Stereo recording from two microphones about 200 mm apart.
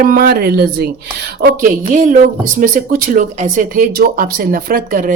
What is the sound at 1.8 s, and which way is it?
A woman's voice, 40° right (ahead or behind).